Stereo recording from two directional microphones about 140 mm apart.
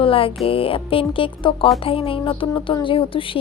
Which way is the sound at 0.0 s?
40° left (ahead or behind).